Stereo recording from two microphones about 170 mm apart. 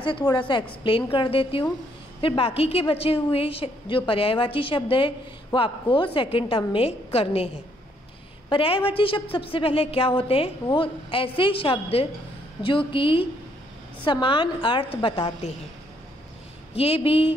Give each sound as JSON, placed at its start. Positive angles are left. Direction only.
{"t": 0.0, "sound": "a woman's voice", "side_deg": 25}
{"t": 16.7, "sound": "a woman's voice", "side_deg": 35}